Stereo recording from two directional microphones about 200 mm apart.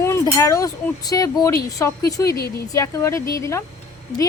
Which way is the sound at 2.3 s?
50° left (ahead or behind).